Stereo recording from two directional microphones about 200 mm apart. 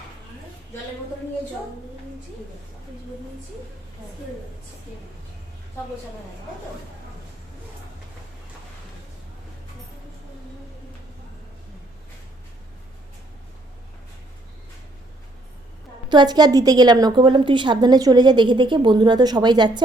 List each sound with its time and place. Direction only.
16.0 s a woman's voice: 20° right (ahead or behind)